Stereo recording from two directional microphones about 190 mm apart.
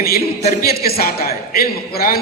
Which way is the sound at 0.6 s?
55° left (ahead or behind).